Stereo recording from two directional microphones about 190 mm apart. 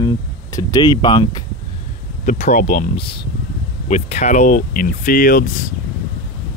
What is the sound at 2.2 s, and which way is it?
Speech, 40° left (ahead or behind).